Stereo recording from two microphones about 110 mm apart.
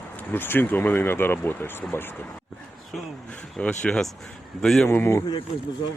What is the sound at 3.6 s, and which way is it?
Speech, 10° left (ahead or behind).